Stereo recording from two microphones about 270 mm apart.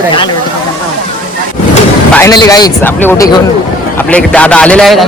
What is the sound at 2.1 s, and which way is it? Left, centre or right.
A man's voice, centre.